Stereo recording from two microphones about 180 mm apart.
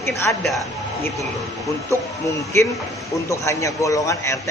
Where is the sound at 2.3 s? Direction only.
15° left (ahead or behind).